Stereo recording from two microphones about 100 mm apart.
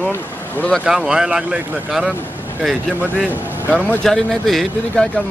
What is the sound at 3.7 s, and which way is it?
Speech, 10° left (ahead or behind).